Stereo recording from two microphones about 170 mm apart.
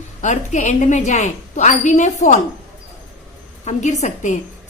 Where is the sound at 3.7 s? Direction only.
45° left (ahead or behind).